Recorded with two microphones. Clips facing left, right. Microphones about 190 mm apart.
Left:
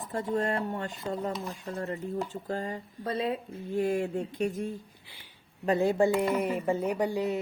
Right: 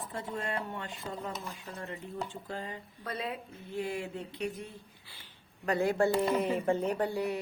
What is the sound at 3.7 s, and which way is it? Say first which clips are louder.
Speech: left 8 dB; 45° left (ahead or behind).